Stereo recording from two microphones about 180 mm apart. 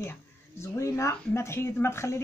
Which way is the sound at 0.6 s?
15° left (ahead or behind).